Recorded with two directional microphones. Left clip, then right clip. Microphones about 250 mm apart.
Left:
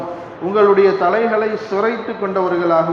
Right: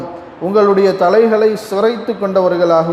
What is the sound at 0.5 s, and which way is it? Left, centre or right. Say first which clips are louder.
Speech: right 1 dB; right.